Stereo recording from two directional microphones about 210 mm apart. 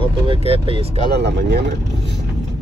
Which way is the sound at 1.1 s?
55° right (ahead or behind).